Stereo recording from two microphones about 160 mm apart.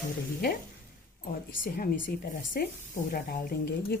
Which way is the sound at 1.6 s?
60° left (ahead or behind).